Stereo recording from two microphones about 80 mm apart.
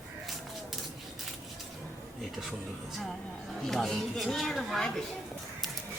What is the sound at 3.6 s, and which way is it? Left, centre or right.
Speech, centre.